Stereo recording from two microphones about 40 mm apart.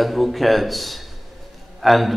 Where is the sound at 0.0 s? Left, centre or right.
Centre.